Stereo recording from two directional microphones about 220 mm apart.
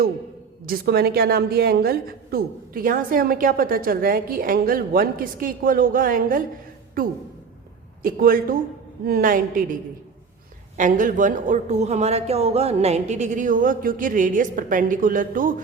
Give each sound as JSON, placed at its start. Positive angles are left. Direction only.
{"t": 0.6, "sound": "a woman's voice", "side_deg": -45}
{"t": 10.8, "sound": "a woman's voice", "side_deg": -35}